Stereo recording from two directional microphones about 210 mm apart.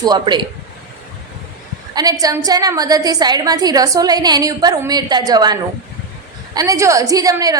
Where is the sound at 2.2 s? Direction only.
15° right (ahead or behind).